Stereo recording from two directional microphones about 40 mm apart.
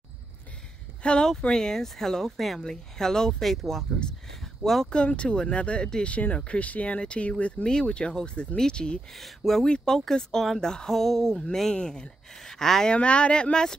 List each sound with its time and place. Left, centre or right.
1.0 s speech: left
1.5 s speech: centre
2.6 s speech: centre
4.4 s a sound: centre
4.8 s speech: left
5.3 s speech: centre
5.6 s speech: left
9.1 s speech: centre
11.7 s speech: left
12.4 s speech: centre
12.8 s speech: left